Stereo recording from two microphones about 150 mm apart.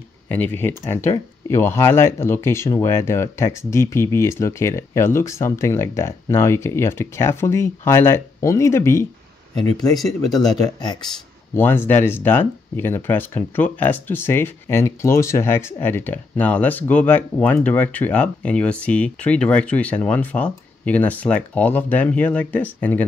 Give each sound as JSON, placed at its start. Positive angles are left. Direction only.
{"t": 0.3, "sound": "speech", "side_deg": 10}
{"t": 9.9, "sound": "speech", "side_deg": 0}
{"t": 10.5, "sound": "speech", "side_deg": 30}
{"t": 11.5, "sound": "speech", "side_deg": 15}